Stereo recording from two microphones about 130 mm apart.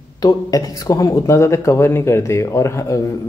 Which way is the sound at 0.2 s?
30° left (ahead or behind).